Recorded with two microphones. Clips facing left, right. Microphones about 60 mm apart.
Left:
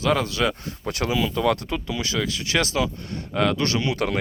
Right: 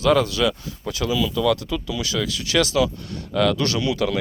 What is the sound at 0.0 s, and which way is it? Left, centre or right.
Speech, left.